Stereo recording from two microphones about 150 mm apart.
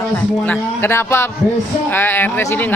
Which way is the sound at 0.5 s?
15° left (ahead or behind).